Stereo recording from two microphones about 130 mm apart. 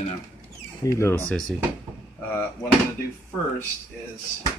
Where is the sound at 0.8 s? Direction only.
20° left (ahead or behind).